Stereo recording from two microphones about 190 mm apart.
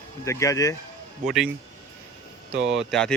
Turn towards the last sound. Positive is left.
turn(degrees=0)  # may be behind; listen again after turning